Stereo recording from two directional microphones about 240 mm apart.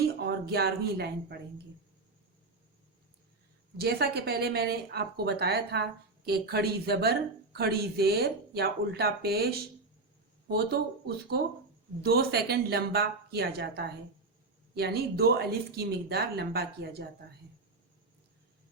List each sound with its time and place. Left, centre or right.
0.0 s speech: right
3.8 s speech: right